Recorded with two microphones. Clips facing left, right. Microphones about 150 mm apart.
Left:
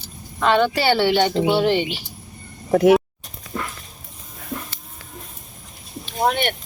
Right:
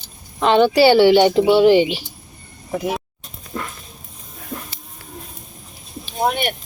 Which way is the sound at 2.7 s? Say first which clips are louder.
Left 10 dB; 75° left (ahead or behind).